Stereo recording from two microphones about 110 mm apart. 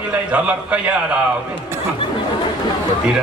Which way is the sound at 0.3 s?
10° right (ahead or behind).